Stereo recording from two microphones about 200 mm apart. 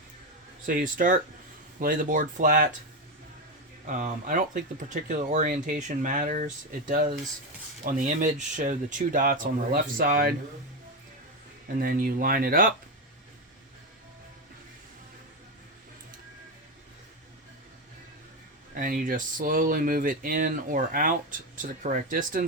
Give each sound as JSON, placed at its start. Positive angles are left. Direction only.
{"t": 0.6, "sound": "speech", "side_deg": -45}
{"t": 3.8, "sound": "speech", "side_deg": -40}
{"t": 11.8, "sound": "speech", "side_deg": -45}
{"t": 18.8, "sound": "speech", "side_deg": -45}